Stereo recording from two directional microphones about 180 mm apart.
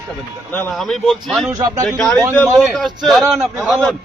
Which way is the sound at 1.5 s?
15° right (ahead or behind).